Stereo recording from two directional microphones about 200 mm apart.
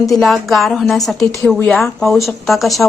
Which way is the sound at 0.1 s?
Centre (ahead or behind).